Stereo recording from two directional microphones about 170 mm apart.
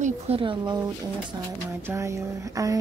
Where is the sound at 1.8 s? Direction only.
15° right (ahead or behind).